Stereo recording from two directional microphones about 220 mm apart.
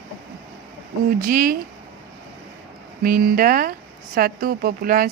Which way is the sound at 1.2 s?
40° right (ahead or behind).